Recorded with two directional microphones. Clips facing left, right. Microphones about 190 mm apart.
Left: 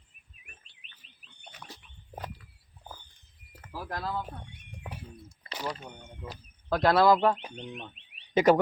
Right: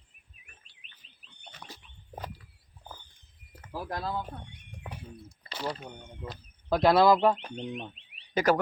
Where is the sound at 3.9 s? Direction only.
15° right (ahead or behind).